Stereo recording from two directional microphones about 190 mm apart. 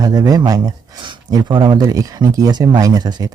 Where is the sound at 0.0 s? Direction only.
20° right (ahead or behind).